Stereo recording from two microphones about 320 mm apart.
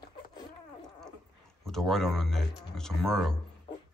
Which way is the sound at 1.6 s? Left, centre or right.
Centre.